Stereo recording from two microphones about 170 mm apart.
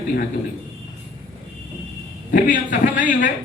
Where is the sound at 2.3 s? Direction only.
50° left (ahead or behind).